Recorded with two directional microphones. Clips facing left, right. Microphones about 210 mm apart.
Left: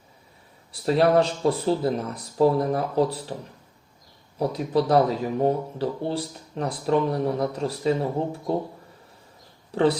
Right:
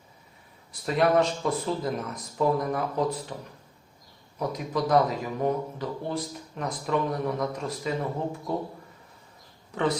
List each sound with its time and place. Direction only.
0.7 s speech: 30° left (ahead or behind)
4.4 s speech: 30° left (ahead or behind)
9.7 s speech: 30° left (ahead or behind)